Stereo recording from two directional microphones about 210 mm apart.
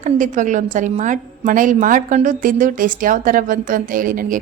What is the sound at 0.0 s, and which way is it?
A woman's voice, 35° right (ahead or behind).